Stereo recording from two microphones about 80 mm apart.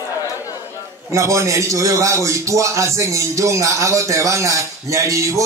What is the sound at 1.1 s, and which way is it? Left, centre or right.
A man's voice, right.